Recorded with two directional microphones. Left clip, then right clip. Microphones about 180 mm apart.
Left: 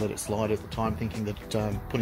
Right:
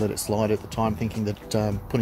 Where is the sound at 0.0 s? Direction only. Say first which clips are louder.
Right 4 dB; 30° right (ahead or behind).